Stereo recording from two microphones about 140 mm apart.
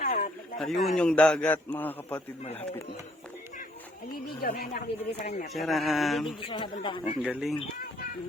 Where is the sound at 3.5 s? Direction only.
80° left.